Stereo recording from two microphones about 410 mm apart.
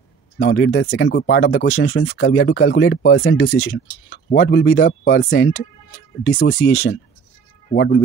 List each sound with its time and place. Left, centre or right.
0.4 s speech: left